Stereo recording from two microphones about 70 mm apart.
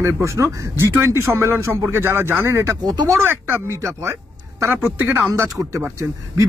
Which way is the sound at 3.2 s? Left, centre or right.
Right.